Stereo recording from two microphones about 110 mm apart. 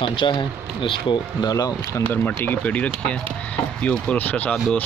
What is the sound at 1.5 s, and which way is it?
Speech, 30° left (ahead or behind).